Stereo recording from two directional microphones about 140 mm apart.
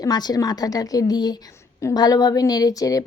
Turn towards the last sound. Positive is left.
turn(degrees=25)  # may be behind; listen again after turning